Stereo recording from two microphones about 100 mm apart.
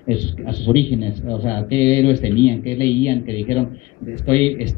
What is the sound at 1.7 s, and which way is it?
A man's voice, 25° left (ahead or behind).